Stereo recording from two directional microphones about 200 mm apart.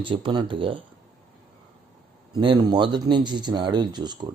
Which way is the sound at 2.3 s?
20° right (ahead or behind).